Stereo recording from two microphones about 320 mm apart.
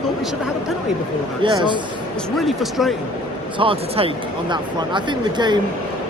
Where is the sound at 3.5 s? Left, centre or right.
Centre.